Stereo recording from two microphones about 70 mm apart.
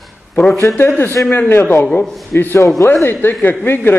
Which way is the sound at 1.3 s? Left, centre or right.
Left.